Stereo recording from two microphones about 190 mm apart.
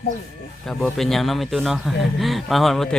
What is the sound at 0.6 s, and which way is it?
A man's voice, centre (ahead or behind).